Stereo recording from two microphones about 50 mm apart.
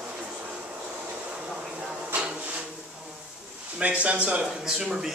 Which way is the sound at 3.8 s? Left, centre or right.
Right.